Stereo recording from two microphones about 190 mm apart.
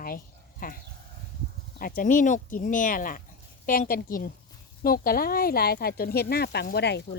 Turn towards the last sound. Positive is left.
turn(degrees=60)  # may be behind; listen again after turning